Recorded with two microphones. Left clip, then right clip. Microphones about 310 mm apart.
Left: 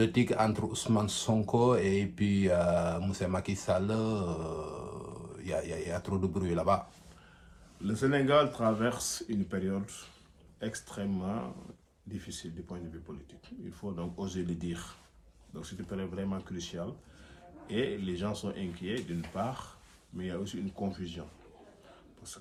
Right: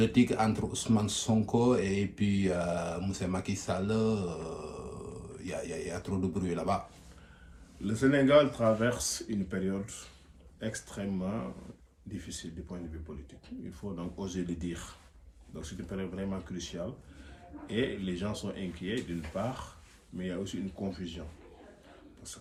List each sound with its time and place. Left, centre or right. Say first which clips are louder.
0.0 s speech: even; left
7.9 s speech: right 2 dB; centre
20.1 s speech: right 1 dB; centre